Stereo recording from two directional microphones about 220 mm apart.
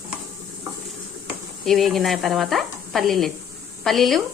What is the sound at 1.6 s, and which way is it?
Speech, centre (ahead or behind).